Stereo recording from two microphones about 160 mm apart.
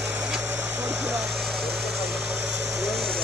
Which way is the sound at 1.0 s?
Centre (ahead or behind).